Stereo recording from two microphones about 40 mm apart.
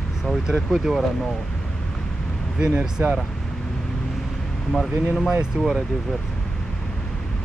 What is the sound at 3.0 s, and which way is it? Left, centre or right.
Speech, right.